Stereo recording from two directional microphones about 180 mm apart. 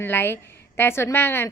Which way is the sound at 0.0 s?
10° left (ahead or behind).